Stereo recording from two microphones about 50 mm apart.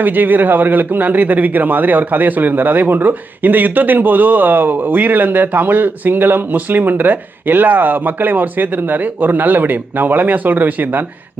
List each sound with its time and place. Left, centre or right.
0.0 s speech: right